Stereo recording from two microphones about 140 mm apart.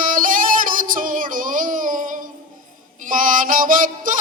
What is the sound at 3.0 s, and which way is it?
Music, 75° right (ahead or behind).